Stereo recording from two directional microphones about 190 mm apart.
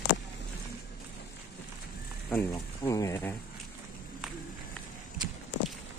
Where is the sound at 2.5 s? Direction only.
20° left (ahead or behind).